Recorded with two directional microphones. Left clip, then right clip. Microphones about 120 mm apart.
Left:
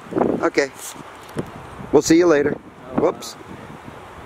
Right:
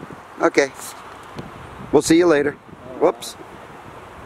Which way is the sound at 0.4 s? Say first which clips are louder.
Right 8 dB; 15° right (ahead or behind).